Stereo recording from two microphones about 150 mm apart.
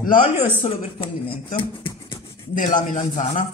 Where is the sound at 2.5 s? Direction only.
60° left (ahead or behind).